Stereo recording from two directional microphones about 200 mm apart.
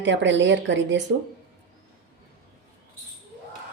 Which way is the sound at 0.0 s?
65° right (ahead or behind).